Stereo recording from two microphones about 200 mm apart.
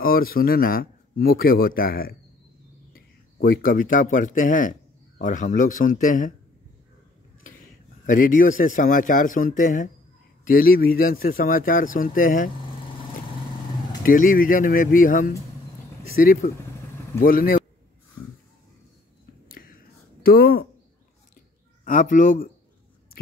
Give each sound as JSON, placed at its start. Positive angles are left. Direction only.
{"t": 0.0, "sound": "speech", "side_deg": 45}
{"t": 8.1, "sound": "speech", "side_deg": 45}
{"t": 14.0, "sound": "speech", "side_deg": 45}
{"t": 20.2, "sound": "speech", "side_deg": 45}
{"t": 21.8, "sound": "speech", "side_deg": 45}
{"t": 23.2, "sound": "a sound", "side_deg": 45}